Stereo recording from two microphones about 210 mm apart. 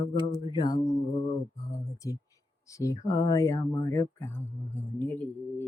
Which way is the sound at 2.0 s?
15° left (ahead or behind).